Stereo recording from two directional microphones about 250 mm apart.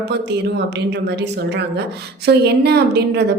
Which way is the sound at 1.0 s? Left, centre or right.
Right.